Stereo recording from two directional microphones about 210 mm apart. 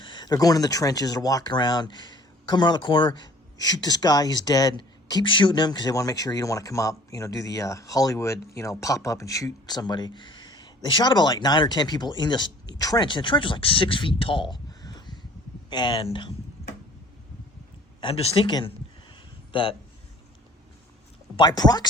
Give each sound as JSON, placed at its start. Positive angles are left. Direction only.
{"t": 0.0, "sound": "speech", "side_deg": 20}
{"t": 18.0, "sound": "speech", "side_deg": 25}
{"t": 21.3, "sound": "speech", "side_deg": 20}